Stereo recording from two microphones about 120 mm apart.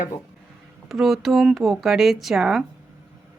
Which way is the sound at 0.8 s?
Centre (ahead or behind).